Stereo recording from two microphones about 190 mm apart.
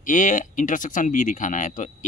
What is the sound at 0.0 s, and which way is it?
Speech, 40° left (ahead or behind).